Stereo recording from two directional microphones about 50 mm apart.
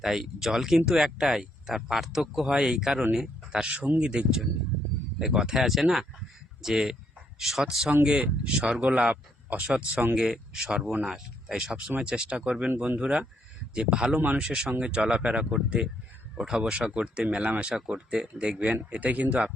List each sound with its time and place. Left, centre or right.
0.0 s speech: centre
8.0 s speech: right
10.2 s speech: centre; by 19.5 s right